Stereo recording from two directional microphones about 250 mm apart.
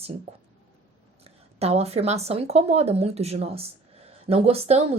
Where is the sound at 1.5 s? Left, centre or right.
Right.